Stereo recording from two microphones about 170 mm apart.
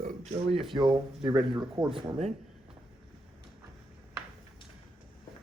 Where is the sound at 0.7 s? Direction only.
25° right (ahead or behind).